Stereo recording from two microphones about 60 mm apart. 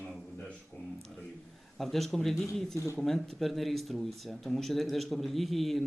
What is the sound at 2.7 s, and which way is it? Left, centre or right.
Speech, left.